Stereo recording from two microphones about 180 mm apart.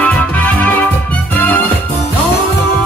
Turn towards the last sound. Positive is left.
turn(degrees=10)  # may be behind; listen again after turning